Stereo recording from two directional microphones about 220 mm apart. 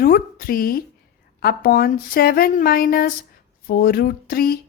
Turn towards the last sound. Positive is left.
turn(degrees=45)  # may be behind; listen again after turning